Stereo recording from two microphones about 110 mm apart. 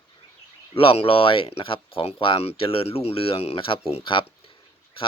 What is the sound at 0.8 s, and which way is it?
Speech, 60° left (ahead or behind).